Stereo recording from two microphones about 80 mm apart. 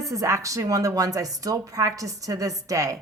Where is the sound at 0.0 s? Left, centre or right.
Right.